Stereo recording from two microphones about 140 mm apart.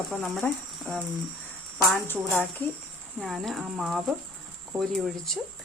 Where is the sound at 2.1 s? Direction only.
15° left (ahead or behind).